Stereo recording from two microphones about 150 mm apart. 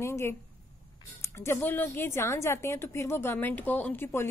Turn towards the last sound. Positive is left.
turn(degrees=15)  # may be behind; listen again after turning